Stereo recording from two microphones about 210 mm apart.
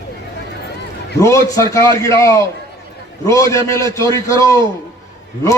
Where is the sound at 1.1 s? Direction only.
15° left (ahead or behind).